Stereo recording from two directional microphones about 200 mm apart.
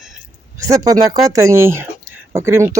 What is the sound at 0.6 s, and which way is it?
Speech, 15° right (ahead or behind).